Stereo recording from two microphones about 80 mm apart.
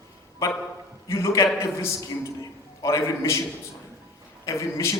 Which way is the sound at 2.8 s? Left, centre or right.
Left.